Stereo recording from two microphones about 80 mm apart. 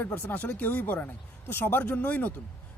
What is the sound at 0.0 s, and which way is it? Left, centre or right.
Speech, left.